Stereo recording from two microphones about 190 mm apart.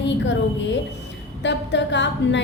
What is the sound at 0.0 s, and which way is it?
A woman's voice, 70° left (ahead or behind).